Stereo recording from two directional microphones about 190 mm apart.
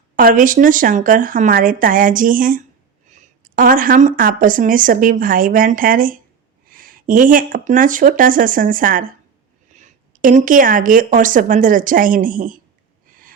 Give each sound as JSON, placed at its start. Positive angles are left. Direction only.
{"t": 0.2, "sound": "speech", "side_deg": -45}